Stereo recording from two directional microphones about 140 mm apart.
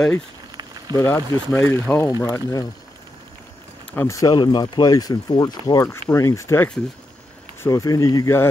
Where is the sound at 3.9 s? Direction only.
20° left (ahead or behind).